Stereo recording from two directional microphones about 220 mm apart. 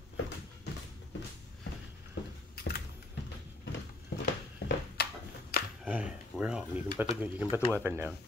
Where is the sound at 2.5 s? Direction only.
45° left (ahead or behind).